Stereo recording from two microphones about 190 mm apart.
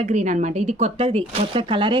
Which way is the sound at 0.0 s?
35° right (ahead or behind).